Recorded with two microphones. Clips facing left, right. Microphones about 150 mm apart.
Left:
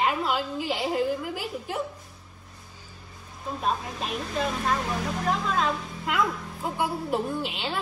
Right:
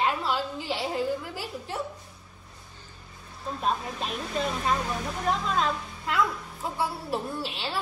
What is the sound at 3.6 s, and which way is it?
Speech, 5° left (ahead or behind).